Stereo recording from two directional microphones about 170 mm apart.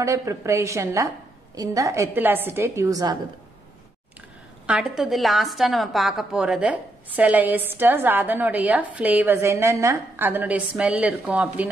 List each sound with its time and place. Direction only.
0.0 s a woman's voice: 20° right (ahead or behind)
4.6 s a woman's voice: 5° right (ahead or behind)